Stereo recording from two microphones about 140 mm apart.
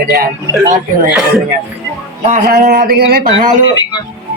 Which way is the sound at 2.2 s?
75° right (ahead or behind).